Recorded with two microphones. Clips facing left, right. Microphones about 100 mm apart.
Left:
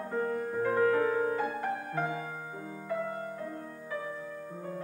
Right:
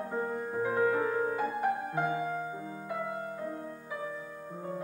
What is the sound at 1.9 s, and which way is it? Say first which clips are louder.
Music: right 2 dB; 15° right (ahead or behind).